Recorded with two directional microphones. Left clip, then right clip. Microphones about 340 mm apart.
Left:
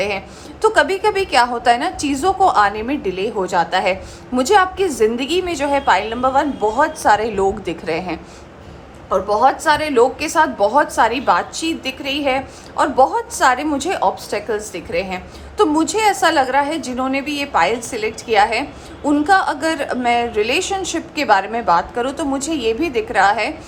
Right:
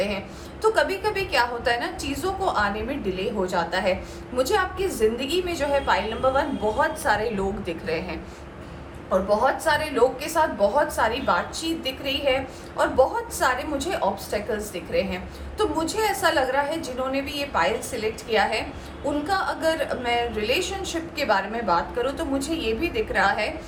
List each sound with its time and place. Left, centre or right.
0.6 s a woman's voice: centre
9.3 s a woman's voice: left